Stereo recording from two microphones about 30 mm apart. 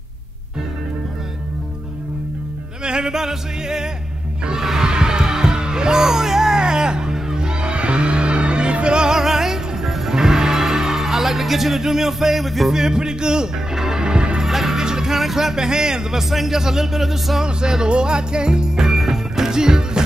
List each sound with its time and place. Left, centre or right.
2.8 s music: right
4.8 s music: right
9.1 s music: centre
12.7 s music: right
14.0 s music: right
14.4 s music: centre
14.8 s music: right
15.1 s speech: centre
17.5 s music: right
18.9 s music: centre